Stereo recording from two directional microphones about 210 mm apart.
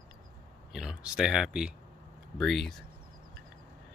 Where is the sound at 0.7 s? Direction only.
5° right (ahead or behind).